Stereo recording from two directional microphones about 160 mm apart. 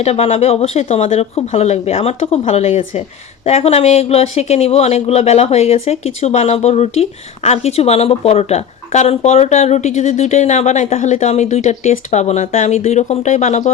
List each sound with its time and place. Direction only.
0.0 s speech: 40° left (ahead or behind)